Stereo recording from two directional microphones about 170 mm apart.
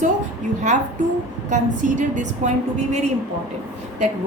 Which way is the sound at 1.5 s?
45° right (ahead or behind).